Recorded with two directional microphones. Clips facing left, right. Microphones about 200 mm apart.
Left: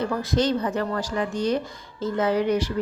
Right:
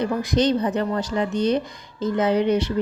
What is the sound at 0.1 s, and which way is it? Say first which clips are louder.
A woman's voice: right 3 dB; 15° right (ahead or behind).